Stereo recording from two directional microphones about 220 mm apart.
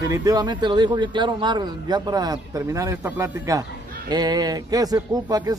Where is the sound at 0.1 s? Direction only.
15° right (ahead or behind).